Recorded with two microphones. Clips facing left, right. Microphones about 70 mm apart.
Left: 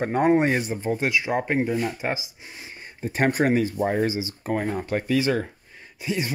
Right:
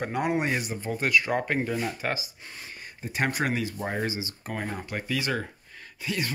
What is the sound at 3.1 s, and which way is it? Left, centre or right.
Speech, left.